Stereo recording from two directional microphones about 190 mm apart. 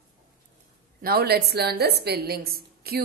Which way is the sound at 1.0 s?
55° right (ahead or behind).